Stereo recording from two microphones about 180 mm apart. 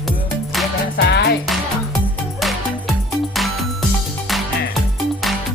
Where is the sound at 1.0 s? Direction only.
65° left (ahead or behind).